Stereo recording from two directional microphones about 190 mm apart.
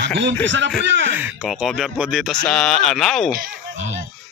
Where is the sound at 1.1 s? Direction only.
5° right (ahead or behind).